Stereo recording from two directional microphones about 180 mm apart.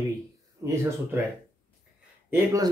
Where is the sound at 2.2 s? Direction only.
10° right (ahead or behind).